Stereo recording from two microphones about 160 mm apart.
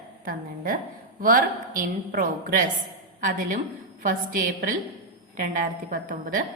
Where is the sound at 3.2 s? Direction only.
55° right (ahead or behind).